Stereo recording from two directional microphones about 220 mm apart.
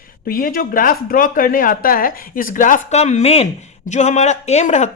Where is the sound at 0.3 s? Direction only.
40° left (ahead or behind).